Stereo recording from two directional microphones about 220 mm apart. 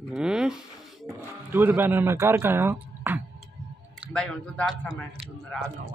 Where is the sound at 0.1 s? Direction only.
5° right (ahead or behind).